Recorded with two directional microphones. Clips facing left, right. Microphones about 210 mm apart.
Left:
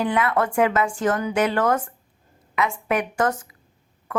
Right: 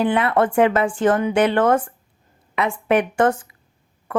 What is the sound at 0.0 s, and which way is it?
A woman's voice, 30° right (ahead or behind).